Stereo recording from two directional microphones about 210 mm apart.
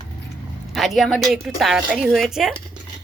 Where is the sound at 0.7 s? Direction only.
Centre (ahead or behind).